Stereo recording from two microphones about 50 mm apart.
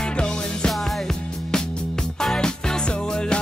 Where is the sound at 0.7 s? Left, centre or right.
Centre.